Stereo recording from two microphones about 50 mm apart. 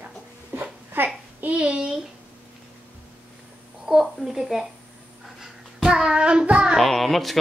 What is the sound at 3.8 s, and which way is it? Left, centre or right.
Speech, centre.